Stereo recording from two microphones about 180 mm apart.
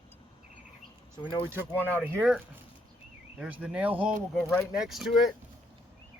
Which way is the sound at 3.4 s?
5° right (ahead or behind).